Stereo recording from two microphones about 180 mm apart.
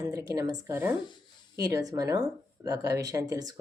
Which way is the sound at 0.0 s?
15° right (ahead or behind).